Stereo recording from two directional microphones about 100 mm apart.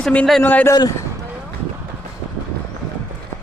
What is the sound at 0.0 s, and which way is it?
Speech, 15° left (ahead or behind).